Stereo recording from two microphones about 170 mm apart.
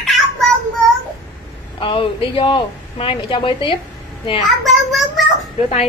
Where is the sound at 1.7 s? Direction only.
30° left (ahead or behind).